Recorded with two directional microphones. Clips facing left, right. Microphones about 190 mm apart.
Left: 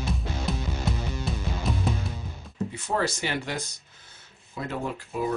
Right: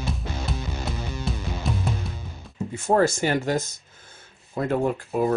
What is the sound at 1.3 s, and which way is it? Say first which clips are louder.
Music: right 2 dB; centre (ahead or behind).